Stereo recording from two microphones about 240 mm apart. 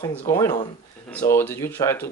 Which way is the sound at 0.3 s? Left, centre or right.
Centre.